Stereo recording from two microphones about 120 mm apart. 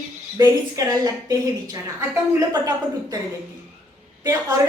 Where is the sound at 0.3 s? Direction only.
30° right (ahead or behind).